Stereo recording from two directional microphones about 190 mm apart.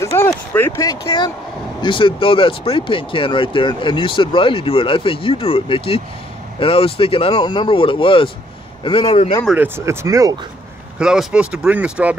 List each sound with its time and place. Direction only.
0.0 s a sound: 15° left (ahead or behind)
0.3 s speech: 10° left (ahead or behind); by 9.4 s 30° left (ahead or behind)
9.6 s speech: 15° right (ahead or behind)
11.0 s speech: 5° right (ahead or behind)